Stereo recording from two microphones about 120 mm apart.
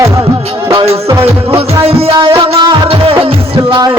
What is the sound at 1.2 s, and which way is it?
Music, 50° right (ahead or behind).